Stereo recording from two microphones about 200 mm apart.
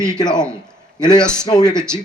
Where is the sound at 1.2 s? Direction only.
5° left (ahead or behind).